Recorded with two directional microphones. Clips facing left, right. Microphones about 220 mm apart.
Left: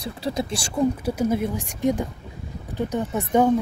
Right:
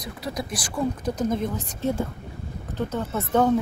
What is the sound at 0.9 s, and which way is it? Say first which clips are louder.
Speech: left 2 dB; 10° left (ahead or behind).